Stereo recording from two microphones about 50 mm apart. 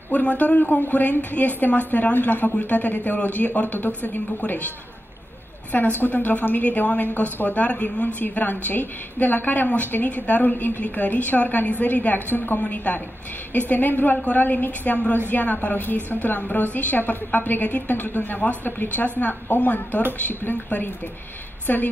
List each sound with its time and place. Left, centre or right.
0.1 s a woman's voice: left
5.9 s a woman's voice: left